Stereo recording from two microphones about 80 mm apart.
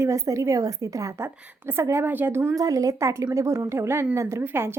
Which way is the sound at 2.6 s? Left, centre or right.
Right.